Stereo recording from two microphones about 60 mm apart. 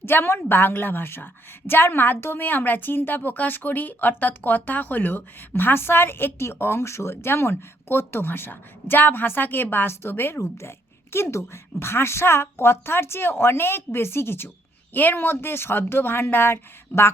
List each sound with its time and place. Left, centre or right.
0.0 s a woman's voice: left